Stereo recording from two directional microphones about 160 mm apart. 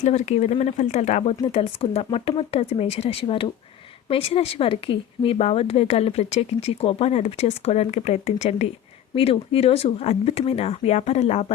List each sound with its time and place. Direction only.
0.0 s a woman's voice: 45° left (ahead or behind)